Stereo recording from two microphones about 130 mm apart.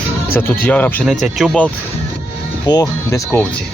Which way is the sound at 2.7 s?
30° left (ahead or behind).